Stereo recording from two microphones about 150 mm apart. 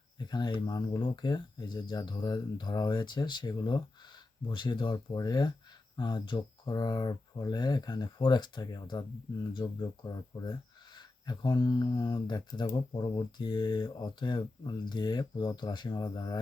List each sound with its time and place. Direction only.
0.2 s speech: 30° left (ahead or behind)